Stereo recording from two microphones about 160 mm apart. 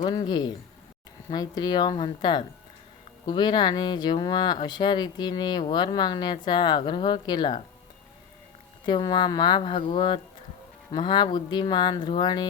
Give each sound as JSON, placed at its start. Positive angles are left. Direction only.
{"t": 0.0, "sound": "speech", "side_deg": 25}
{"t": 8.9, "sound": "speech", "side_deg": 30}